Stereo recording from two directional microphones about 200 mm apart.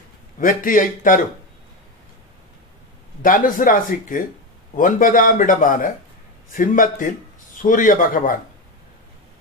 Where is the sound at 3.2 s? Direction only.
45° left (ahead or behind).